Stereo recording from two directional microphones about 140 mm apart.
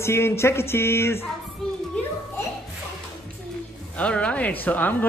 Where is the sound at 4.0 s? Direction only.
10° left (ahead or behind).